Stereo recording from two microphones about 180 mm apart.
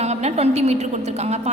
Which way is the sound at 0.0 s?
35° right (ahead or behind).